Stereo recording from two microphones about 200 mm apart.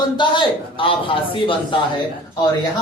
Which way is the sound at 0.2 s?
25° left (ahead or behind).